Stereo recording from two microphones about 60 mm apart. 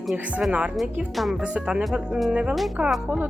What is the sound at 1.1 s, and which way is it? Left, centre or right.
Speech, centre.